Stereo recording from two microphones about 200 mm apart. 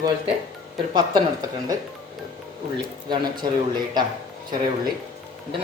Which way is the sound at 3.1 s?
20° right (ahead or behind).